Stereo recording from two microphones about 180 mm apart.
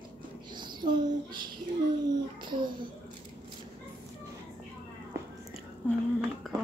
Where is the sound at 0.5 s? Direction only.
25° right (ahead or behind).